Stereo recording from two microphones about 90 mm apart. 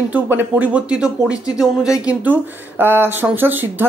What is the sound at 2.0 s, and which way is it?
Speech, 20° right (ahead or behind).